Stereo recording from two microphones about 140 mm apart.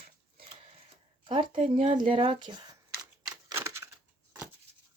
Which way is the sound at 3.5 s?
20° right (ahead or behind).